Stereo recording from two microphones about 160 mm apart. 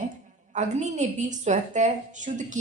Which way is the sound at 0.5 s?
45° right (ahead or behind).